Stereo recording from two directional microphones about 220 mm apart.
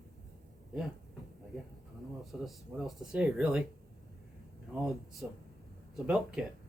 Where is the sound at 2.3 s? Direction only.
Centre (ahead or behind).